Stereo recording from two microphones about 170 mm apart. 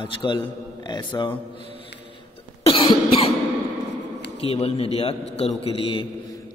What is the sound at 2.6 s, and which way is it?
Cough, 30° left (ahead or behind).